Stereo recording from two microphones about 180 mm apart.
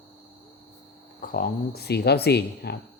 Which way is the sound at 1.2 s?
50° left (ahead or behind).